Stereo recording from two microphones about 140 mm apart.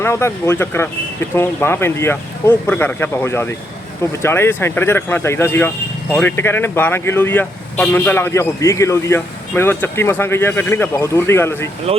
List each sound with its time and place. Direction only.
0.0 s speech: 20° left (ahead or behind)